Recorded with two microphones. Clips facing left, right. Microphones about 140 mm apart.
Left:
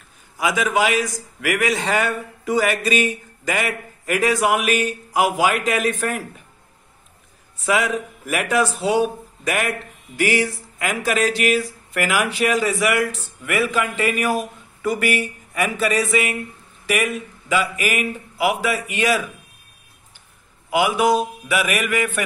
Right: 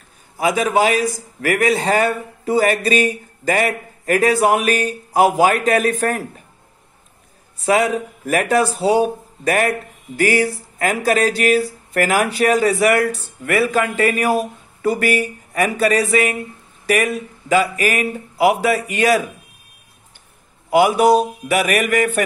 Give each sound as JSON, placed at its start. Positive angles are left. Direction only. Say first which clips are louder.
{"t": 0.4, "sound": "a man's voice", "louder": "right 3 dB", "side_deg": -40}
{"t": 7.6, "sound": "a man's voice", "louder": "right 4 dB", "side_deg": -35}
{"t": 20.7, "sound": "a man's voice", "louder": "right 5 dB", "side_deg": -40}